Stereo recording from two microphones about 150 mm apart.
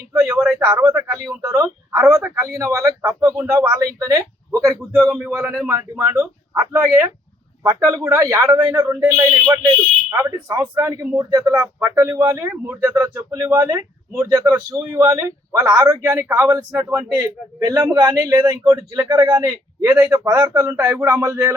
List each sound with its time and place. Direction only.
0.1 s speech: 20° right (ahead or behind)
0.3 s speech: 5° right (ahead or behind)
0.7 s speech: 20° right (ahead or behind)